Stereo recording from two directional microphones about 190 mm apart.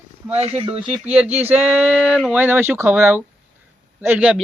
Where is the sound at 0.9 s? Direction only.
5° right (ahead or behind).